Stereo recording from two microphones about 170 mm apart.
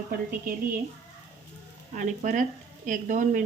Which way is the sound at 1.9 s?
45° right (ahead or behind).